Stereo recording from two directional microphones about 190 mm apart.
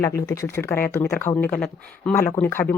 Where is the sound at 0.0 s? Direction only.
15° left (ahead or behind).